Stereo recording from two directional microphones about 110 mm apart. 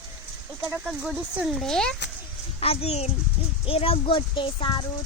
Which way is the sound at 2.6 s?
65° left (ahead or behind).